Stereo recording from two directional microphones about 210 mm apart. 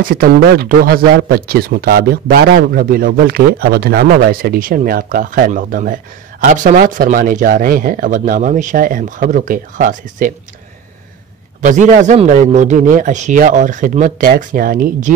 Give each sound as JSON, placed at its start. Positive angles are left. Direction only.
{"t": 0.0, "sound": "speech", "side_deg": -45}
{"t": 11.6, "sound": "speech", "side_deg": -35}